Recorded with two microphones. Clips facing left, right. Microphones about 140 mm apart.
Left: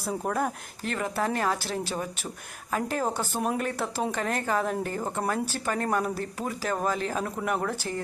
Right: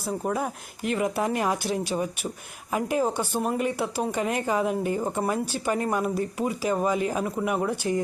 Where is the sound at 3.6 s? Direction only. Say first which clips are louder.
Right 3 dB; 10° right (ahead or behind).